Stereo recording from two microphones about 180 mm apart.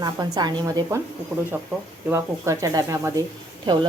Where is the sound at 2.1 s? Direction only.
15° right (ahead or behind).